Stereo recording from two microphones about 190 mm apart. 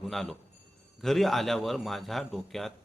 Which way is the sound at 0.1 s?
Centre (ahead or behind).